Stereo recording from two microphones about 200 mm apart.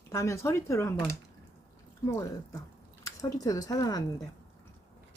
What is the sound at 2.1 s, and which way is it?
Speech, 15° left (ahead or behind).